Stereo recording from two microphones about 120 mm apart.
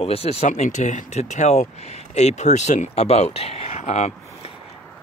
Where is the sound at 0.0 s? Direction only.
55° left (ahead or behind).